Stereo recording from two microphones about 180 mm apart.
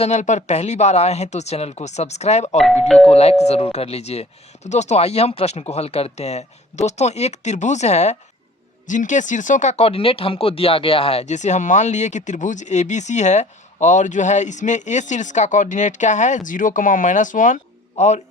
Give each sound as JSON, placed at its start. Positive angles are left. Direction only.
{"t": 0.0, "sound": "speech", "side_deg": 40}
{"t": 2.8, "sound": "speech", "side_deg": 0}
{"t": 3.1, "sound": "speech", "side_deg": 35}